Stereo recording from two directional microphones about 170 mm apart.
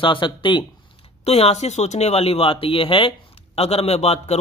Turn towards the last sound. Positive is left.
turn(degrees=40)  # may be behind; listen again after turning